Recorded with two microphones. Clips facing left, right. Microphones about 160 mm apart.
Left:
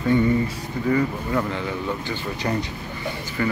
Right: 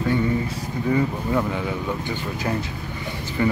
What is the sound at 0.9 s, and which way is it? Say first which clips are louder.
Speech: right 1 dB; 10° right (ahead or behind).